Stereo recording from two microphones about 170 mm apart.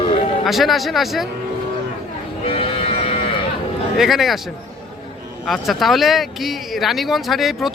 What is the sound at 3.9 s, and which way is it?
Speech, centre (ahead or behind).